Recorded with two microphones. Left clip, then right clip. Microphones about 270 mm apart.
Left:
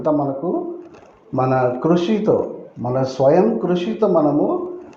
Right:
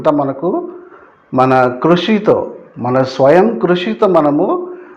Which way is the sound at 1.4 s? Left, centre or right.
Right.